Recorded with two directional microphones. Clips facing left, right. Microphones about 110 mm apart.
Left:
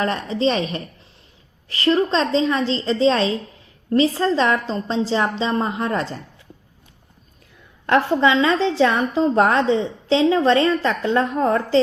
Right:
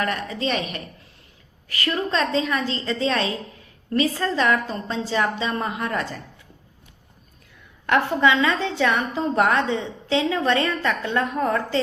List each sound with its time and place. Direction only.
0.0 s a woman's voice: 30° left (ahead or behind)
7.9 s a woman's voice: 30° left (ahead or behind)